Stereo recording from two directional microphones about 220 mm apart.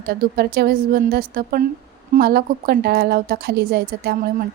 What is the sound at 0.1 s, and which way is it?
A woman's voice, 45° right (ahead or behind).